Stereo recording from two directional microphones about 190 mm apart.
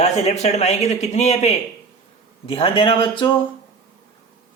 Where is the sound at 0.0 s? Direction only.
35° left (ahead or behind).